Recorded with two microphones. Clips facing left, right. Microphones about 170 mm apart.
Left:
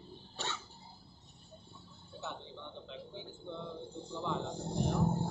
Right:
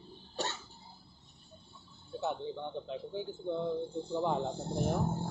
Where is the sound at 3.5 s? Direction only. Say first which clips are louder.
Right 9 dB; 45° right (ahead or behind).